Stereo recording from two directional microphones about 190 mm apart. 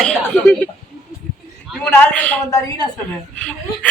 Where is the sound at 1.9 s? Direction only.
10° left (ahead or behind).